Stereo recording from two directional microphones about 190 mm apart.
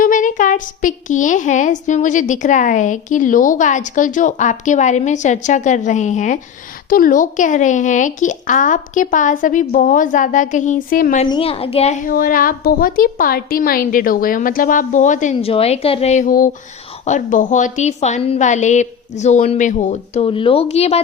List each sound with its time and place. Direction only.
0.0 s a woman's voice: 45° left (ahead or behind)
11.3 s a woman's voice: 30° left (ahead or behind)
12.0 s a woman's voice: 50° left (ahead or behind)